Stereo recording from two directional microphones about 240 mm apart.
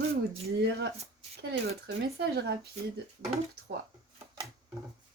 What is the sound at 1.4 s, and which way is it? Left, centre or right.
Speech, right.